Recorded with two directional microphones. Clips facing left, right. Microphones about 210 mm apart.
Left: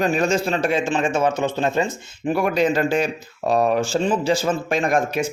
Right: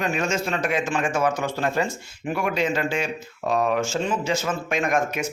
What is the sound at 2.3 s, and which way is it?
Speech, 35° left (ahead or behind).